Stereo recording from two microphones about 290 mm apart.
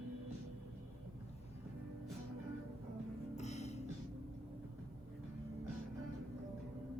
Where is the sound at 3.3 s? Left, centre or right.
Left.